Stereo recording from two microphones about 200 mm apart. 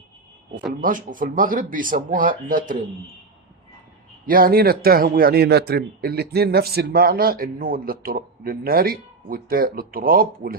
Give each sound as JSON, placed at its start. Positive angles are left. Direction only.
{"t": 0.8, "sound": "a man's voice", "side_deg": -40}
{"t": 4.3, "sound": "a man's voice", "side_deg": -45}